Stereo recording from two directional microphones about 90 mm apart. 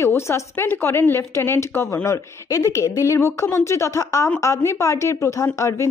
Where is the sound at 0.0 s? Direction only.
30° left (ahead or behind).